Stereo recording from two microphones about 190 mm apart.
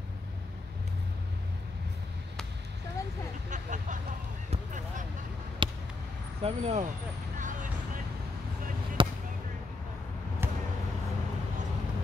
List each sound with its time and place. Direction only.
3.4 s vehicle: 40° right (ahead or behind)
4.5 s a sound: 40° right (ahead or behind)
5.6 s a sound: 25° right (ahead or behind)
6.4 s speech: 35° right (ahead or behind)
7.3 s vehicle: 45° right (ahead or behind)
9.0 s basketball bounce: 25° right (ahead or behind)
10.4 s basketball bounce: 10° right (ahead or behind)